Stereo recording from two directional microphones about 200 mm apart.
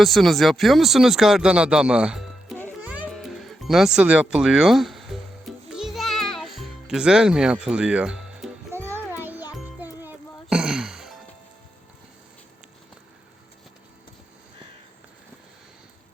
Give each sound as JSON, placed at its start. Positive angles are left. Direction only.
{"t": 0.0, "sound": "speech", "side_deg": 0}
{"t": 5.7, "sound": "music", "side_deg": 0}